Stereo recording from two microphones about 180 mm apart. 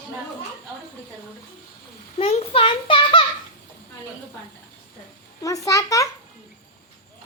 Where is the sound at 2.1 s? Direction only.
35° left (ahead or behind).